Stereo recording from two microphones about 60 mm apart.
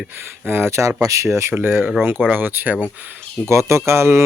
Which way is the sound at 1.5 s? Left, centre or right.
Right.